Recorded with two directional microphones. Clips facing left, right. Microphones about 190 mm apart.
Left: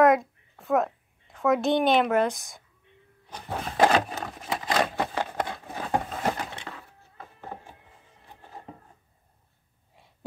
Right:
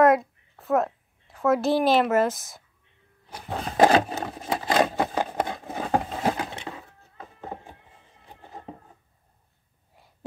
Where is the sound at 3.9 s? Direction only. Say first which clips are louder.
Right 3 dB; 35° right (ahead or behind).